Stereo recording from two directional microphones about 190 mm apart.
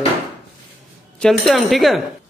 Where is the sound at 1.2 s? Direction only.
Centre (ahead or behind).